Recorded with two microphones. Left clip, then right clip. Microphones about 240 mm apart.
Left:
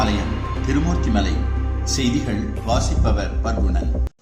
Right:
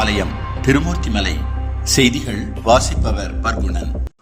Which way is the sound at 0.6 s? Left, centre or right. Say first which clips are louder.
Right 7 dB; right.